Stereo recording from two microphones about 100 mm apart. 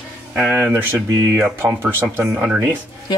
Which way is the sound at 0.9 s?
30° right (ahead or behind).